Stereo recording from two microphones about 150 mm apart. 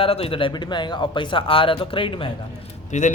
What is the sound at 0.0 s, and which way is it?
Speech, 40° left (ahead or behind).